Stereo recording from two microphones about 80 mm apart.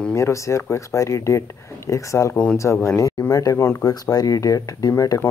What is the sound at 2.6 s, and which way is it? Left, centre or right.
Speech, left.